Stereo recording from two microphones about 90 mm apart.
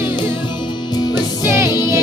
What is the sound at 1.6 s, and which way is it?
Music, 50° left (ahead or behind).